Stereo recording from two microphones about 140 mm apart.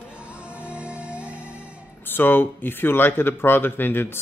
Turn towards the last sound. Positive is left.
turn(degrees=15)  # may be behind; listen again after turning